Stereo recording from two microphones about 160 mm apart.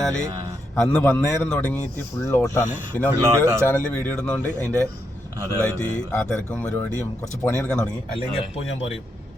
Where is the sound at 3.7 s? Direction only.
10° left (ahead or behind).